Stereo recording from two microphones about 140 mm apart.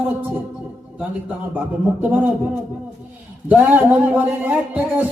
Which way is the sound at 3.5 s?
10° right (ahead or behind).